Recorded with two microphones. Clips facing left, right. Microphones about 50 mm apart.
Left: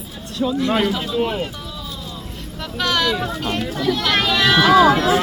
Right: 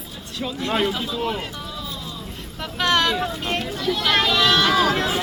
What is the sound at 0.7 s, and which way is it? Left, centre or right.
Speech, centre.